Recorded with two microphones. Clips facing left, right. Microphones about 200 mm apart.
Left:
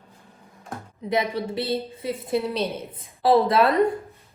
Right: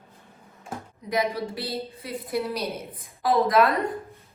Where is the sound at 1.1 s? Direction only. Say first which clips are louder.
Left 2 dB; 25° left (ahead or behind).